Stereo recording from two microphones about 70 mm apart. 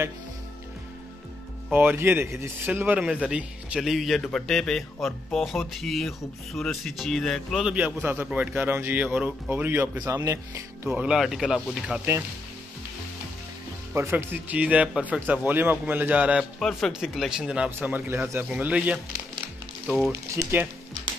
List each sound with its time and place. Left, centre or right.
1.7 s speech: right
3.0 s speech: centre
3.8 s speech: centre
7.7 s speech: right
9.5 s speech: right
10.0 s speech: right
10.9 s speech: centre
11.1 s speech: centre
13.9 s speech: right
16.5 s speech: centre
17.4 s speech: centre
17.6 s speech: right
18.5 s speech: centre